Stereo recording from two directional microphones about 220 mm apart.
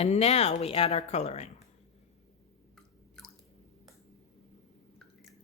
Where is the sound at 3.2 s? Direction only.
5° left (ahead or behind).